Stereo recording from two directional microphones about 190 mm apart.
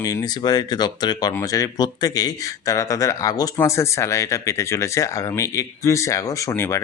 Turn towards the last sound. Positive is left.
turn(degrees=15)  # may be behind; listen again after turning